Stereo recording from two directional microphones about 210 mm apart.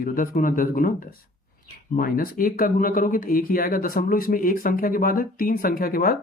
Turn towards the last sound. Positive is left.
turn(degrees=45)  # may be behind; listen again after turning